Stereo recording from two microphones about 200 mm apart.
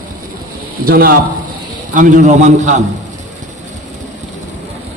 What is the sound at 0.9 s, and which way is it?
A man's voice, 45° right (ahead or behind).